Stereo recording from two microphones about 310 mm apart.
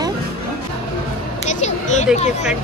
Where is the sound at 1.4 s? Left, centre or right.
Left.